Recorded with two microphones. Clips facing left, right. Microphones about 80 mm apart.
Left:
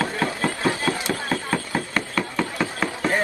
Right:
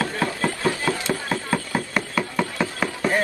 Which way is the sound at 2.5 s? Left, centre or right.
Centre.